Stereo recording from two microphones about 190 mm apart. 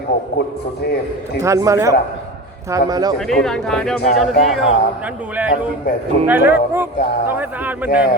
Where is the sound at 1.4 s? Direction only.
15° right (ahead or behind).